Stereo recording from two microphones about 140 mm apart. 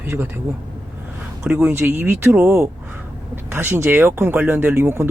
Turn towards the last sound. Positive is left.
turn(degrees=-15)  # may be behind; listen again after turning